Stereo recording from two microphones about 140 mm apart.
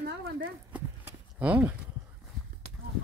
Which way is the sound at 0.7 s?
10° right (ahead or behind).